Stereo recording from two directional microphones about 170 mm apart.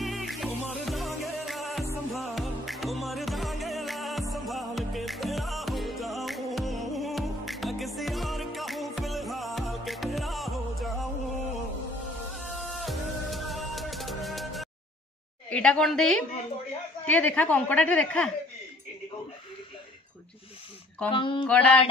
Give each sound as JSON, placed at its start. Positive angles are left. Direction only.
{"t": 0.0, "sound": "music", "side_deg": 0}
{"t": 12.4, "sound": "music", "side_deg": 0}
{"t": 15.5, "sound": "a woman's voice", "side_deg": 5}
{"t": 21.1, "sound": "a sound", "side_deg": 30}
{"t": 21.5, "sound": "a woman's voice", "side_deg": 10}